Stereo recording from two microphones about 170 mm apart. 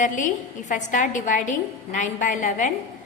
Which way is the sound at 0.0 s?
50° left (ahead or behind).